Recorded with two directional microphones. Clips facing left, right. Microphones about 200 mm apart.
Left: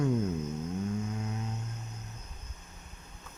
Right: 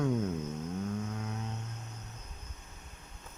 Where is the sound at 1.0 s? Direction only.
5° left (ahead or behind).